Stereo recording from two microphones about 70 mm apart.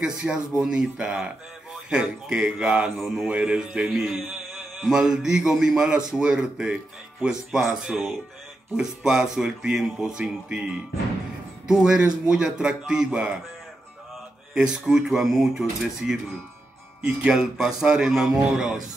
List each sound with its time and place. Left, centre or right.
0.0 s a man's voice: centre
3.9 s mantra: centre
4.8 s a man's voice: centre
7.8 s mantra: centre
8.7 s a man's voice: centre
14.5 s a man's voice: centre
17.3 s a man's voice: centre